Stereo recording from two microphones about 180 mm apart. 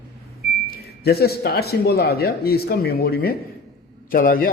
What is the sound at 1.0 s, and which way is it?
A man's voice, 60° left (ahead or behind).